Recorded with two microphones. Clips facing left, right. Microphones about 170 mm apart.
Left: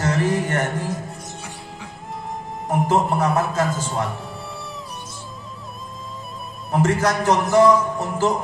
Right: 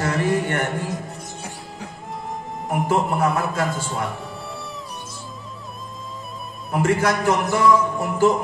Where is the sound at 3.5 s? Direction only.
45° left (ahead or behind).